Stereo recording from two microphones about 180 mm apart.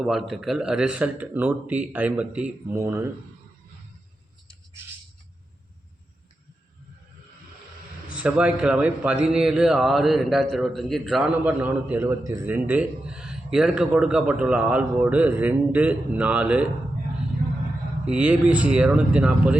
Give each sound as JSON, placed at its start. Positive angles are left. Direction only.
{"t": 0.0, "sound": "a man's voice", "side_deg": 0}
{"t": 8.1, "sound": "a man's voice", "side_deg": -5}
{"t": 18.0, "sound": "a man's voice", "side_deg": -10}